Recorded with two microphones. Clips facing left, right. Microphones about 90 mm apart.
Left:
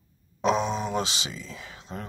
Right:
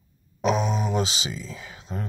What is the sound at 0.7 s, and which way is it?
Speech, 40° left (ahead or behind).